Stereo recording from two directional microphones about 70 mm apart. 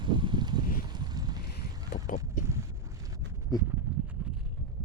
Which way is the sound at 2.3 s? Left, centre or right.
Right.